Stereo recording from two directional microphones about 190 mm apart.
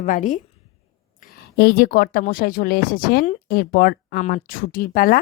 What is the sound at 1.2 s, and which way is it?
Speech, 55° left (ahead or behind).